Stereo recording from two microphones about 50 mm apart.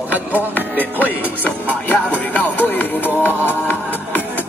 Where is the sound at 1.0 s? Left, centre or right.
Left.